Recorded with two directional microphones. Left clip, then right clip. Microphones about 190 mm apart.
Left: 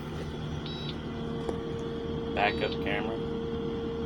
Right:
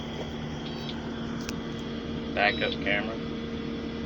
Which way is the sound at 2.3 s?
15° left (ahead or behind).